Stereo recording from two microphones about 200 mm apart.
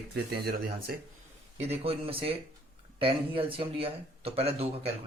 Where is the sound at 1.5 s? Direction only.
30° right (ahead or behind).